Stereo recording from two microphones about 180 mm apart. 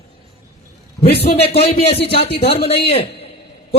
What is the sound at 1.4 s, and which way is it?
A man's voice, 35° left (ahead or behind).